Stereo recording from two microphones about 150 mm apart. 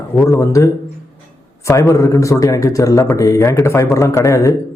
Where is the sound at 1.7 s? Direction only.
20° left (ahead or behind).